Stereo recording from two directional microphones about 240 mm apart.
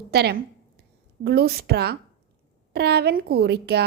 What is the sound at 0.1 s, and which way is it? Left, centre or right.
A woman's voice, right.